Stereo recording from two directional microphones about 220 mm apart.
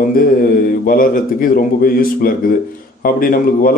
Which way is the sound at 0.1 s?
40° left (ahead or behind).